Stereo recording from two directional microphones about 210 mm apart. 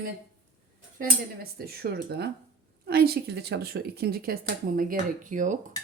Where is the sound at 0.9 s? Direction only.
45° right (ahead or behind).